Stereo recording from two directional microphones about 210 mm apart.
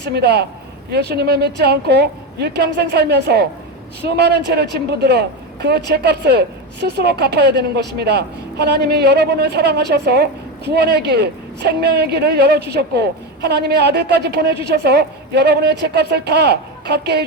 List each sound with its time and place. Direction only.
0.0 s a woman's voice: 50° right (ahead or behind)